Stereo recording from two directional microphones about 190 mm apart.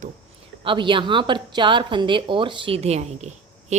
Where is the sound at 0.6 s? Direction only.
25° right (ahead or behind).